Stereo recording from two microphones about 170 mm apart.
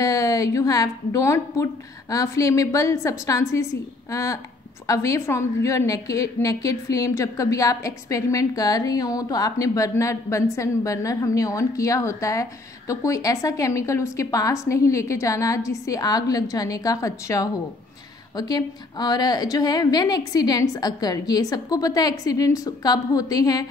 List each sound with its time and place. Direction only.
0.0 s a woman's voice: 20° left (ahead or behind)